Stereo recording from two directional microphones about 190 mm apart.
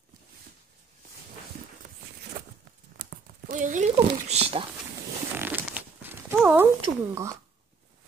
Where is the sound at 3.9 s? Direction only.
30° right (ahead or behind).